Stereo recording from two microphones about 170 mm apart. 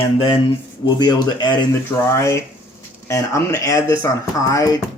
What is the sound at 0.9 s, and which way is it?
Speech, 25° left (ahead or behind).